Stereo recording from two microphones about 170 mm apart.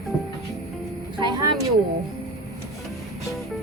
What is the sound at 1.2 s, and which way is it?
Speech, 25° right (ahead or behind).